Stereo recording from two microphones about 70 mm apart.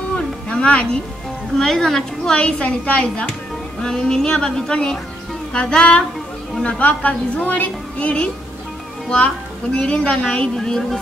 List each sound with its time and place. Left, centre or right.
0.1 s a sound: centre
1.6 s a woman's voice: centre
9.8 s a woman's voice: centre